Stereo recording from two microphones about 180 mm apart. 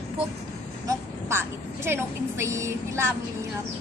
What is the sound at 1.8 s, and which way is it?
A woman's voice, 15° right (ahead or behind).